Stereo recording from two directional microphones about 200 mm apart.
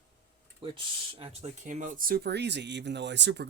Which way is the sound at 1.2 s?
35° right (ahead or behind).